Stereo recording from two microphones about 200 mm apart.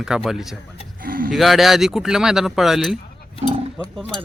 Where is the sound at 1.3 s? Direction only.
Centre (ahead or behind).